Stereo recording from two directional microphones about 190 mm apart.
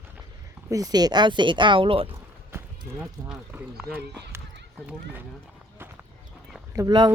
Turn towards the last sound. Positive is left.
turn(degrees=-20)  # may be behind; listen again after turning